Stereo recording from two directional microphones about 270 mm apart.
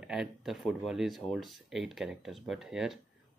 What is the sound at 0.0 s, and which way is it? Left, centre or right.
Speech, centre.